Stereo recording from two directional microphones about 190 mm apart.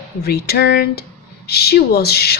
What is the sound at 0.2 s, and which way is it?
Speech, 55° left (ahead or behind).